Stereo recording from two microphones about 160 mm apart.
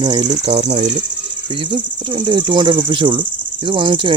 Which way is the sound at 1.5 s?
35° right (ahead or behind).